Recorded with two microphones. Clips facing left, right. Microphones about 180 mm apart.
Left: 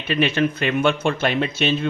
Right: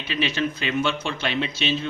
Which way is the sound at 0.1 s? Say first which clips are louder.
Left 6 dB; 55° left (ahead or behind).